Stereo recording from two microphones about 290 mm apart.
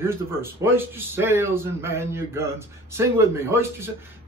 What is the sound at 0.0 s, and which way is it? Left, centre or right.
A man's voice, centre.